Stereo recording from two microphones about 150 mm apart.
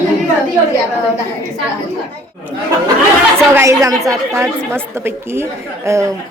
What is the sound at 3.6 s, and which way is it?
A woman's voice, 20° right (ahead or behind).